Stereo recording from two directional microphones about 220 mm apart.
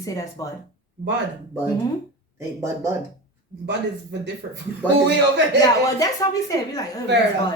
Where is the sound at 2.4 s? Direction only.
15° right (ahead or behind).